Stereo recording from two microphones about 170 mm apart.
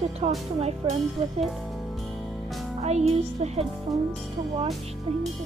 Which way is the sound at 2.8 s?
40° right (ahead or behind).